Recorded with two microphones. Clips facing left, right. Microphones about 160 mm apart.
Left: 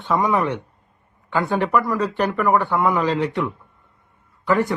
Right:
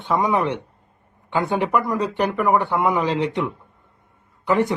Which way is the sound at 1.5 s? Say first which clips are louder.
Left 1 dB; 20° right (ahead or behind).